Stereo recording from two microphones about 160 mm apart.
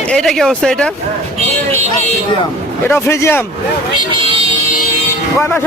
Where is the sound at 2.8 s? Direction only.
15° left (ahead or behind).